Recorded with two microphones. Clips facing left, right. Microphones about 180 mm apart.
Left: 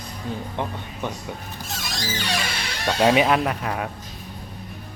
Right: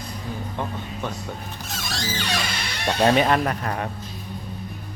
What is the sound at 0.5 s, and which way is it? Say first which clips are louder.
Speech: even; 20° left (ahead or behind).